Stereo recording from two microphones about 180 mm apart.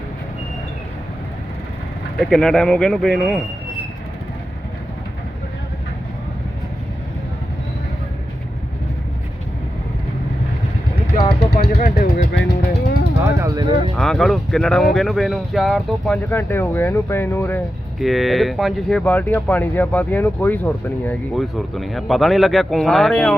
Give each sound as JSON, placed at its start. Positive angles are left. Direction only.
{"t": 2.3, "sound": "speech", "side_deg": 5}
{"t": 11.5, "sound": "vehicle", "side_deg": 60}
{"t": 12.3, "sound": "music", "side_deg": 75}
{"t": 13.2, "sound": "a sound", "side_deg": -15}
{"t": 13.9, "sound": "speech", "side_deg": 0}
{"t": 18.0, "sound": "speech", "side_deg": 0}